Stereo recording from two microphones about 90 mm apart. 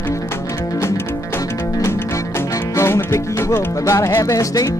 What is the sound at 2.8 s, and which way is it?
Music, 30° left (ahead or behind).